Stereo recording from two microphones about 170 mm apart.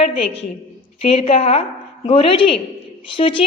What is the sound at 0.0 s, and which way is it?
A woman's voice, 35° left (ahead or behind).